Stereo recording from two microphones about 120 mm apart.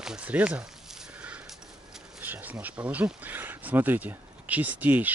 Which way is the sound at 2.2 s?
15° right (ahead or behind).